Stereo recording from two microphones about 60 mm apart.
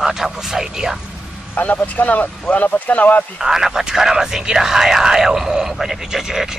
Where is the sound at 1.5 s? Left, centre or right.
Left.